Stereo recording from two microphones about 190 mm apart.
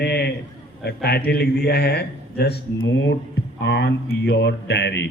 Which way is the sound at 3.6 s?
65° left (ahead or behind).